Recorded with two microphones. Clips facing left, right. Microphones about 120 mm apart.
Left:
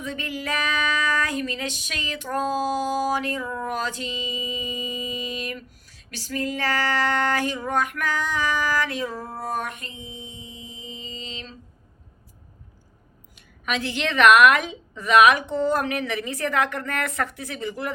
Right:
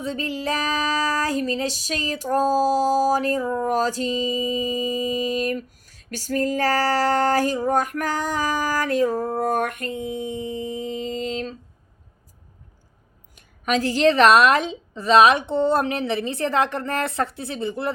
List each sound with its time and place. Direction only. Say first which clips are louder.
0.0 s female singing: right 4 dB; 30° right (ahead or behind); by 11.5 s 50° right (ahead or behind)
13.3 s a woman's voice: right 6 dB; 40° right (ahead or behind)